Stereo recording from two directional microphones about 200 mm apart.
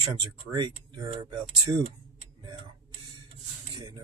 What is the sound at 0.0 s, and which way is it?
Speech, 25° right (ahead or behind).